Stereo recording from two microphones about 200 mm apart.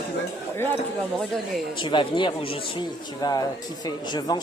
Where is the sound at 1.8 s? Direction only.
25° left (ahead or behind).